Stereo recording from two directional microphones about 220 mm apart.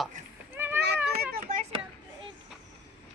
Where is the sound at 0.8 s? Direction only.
50° right (ahead or behind).